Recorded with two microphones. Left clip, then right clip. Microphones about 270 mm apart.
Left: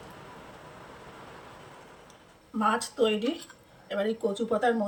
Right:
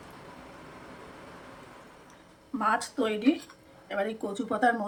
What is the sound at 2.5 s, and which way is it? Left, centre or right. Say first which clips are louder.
Speech: left 1 dB; centre.